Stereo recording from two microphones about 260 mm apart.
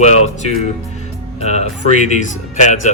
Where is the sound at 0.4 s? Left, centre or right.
Left.